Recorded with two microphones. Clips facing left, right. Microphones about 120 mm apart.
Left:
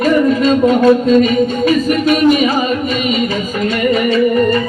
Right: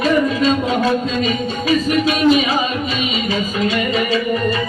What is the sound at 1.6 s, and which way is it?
Speech, 50° left (ahead or behind).